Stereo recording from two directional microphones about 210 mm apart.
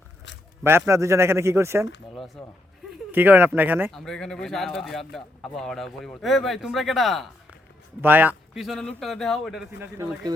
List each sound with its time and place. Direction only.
0.6 s a man's voice: 10° right (ahead or behind)
2.1 s a man's voice: centre (ahead or behind)
3.9 s speech: 5° left (ahead or behind); by 10.3 s 15° right (ahead or behind)